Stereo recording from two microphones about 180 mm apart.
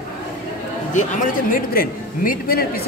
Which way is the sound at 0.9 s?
45° left (ahead or behind).